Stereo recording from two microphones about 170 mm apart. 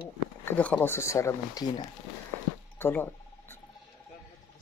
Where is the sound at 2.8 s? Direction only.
10° left (ahead or behind).